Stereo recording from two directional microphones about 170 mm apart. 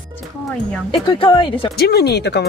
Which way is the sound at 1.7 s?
70° left (ahead or behind).